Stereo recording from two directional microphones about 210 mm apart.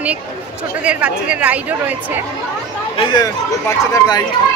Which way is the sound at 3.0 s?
20° left (ahead or behind).